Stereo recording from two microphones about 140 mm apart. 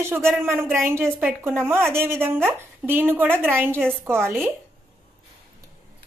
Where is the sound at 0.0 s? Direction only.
15° right (ahead or behind).